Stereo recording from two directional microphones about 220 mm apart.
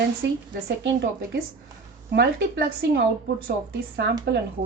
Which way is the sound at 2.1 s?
50° right (ahead or behind).